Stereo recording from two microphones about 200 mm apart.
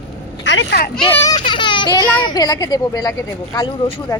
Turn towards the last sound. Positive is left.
turn(degrees=20)  # may be behind; listen again after turning